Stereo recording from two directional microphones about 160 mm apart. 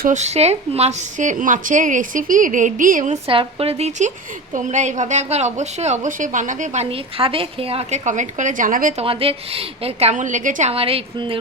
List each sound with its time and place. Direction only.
0.0 s a woman's voice: 50° right (ahead or behind)
3.2 s a woman's voice: 35° right (ahead or behind); by 6.8 s 50° right (ahead or behind)
6.9 s a woman's voice: 35° right (ahead or behind); by 9.0 s 55° right (ahead or behind)
9.0 s a woman's voice: 35° right (ahead or behind)